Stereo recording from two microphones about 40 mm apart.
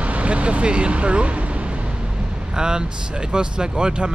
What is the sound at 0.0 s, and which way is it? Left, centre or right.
Speech, right.